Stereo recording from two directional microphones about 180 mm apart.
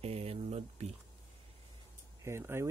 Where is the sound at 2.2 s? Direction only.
15° right (ahead or behind).